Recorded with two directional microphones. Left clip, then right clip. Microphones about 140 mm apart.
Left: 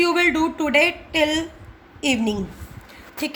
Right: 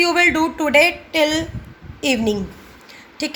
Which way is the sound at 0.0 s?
20° right (ahead or behind).